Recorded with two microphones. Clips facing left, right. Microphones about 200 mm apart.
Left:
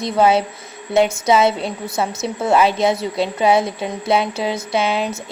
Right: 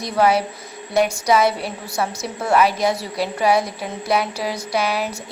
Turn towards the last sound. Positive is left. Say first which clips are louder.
# left 2 dB
turn(degrees=25)  # may be behind; listen again after turning